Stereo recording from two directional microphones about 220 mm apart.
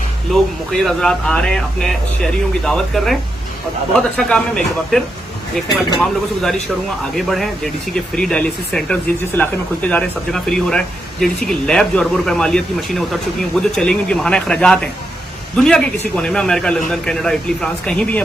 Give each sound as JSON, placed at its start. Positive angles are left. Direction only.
{"t": 0.3, "sound": "speech", "side_deg": 0}